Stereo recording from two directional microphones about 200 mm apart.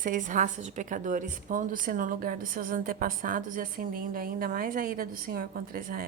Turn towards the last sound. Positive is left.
turn(degrees=-45)  # may be behind; listen again after turning